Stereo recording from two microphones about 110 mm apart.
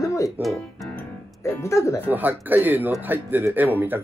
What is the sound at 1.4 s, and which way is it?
Speech, 25° left (ahead or behind).